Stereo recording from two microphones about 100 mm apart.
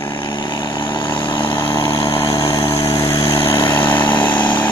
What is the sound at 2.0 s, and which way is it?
Vehicle, 30° left (ahead or behind).